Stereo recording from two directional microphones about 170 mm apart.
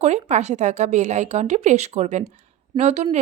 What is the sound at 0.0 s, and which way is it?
A woman's voice, 40° right (ahead or behind).